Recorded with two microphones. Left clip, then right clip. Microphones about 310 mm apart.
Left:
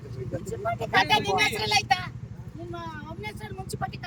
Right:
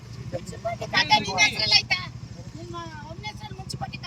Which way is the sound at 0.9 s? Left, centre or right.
Centre.